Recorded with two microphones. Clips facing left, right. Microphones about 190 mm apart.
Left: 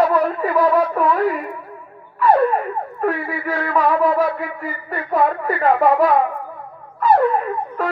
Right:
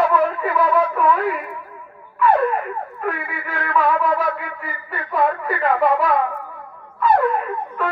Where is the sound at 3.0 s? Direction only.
40° left (ahead or behind).